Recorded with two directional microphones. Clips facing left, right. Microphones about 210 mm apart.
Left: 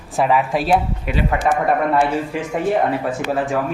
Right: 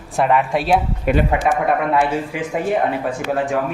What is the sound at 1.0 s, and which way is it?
Speech, 50° right (ahead or behind).